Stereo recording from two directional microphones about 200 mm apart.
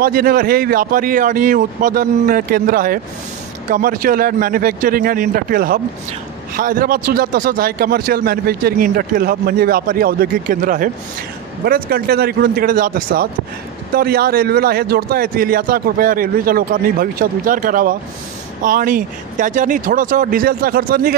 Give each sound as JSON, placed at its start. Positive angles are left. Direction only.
{"t": 0.0, "sound": "speech", "side_deg": -50}